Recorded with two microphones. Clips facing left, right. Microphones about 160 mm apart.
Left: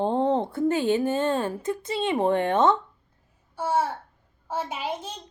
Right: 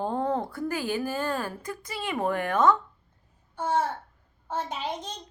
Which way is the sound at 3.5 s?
10° left (ahead or behind).